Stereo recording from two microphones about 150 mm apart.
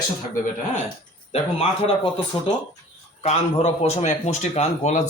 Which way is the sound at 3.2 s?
45° left (ahead or behind).